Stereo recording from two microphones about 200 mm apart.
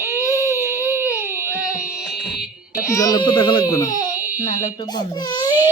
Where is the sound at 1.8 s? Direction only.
Centre (ahead or behind).